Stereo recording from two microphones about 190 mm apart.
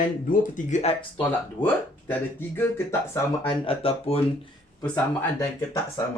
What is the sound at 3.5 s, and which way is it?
Speech, 30° left (ahead or behind).